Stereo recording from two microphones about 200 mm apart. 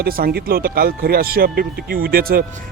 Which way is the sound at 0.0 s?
50° right (ahead or behind).